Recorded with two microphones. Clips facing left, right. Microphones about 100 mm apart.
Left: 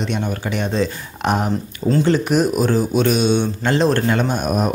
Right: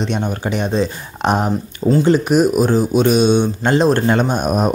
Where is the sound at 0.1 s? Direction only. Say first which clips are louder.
Right 2 dB; 30° right (ahead or behind).